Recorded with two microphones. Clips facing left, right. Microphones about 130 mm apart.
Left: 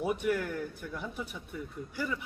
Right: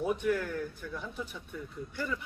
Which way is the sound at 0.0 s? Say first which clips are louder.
Even; 5° left (ahead or behind).